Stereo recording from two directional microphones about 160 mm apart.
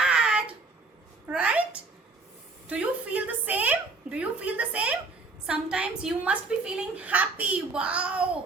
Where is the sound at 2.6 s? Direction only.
10° right (ahead or behind).